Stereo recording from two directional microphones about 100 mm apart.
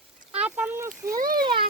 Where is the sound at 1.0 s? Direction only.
30° right (ahead or behind).